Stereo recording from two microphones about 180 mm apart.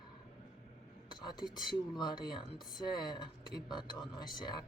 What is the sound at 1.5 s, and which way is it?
Speech, 25° left (ahead or behind).